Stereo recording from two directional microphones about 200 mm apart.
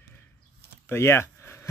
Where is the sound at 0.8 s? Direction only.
10° left (ahead or behind).